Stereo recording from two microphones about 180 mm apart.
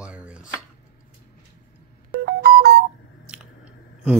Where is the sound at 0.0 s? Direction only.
5° right (ahead or behind).